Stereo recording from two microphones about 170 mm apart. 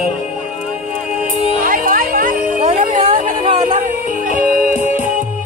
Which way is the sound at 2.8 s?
50° right (ahead or behind).